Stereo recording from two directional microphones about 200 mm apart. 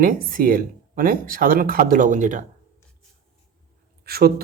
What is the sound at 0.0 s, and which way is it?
Speech, 45° right (ahead or behind).